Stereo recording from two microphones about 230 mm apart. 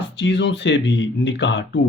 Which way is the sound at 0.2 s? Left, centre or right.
Left.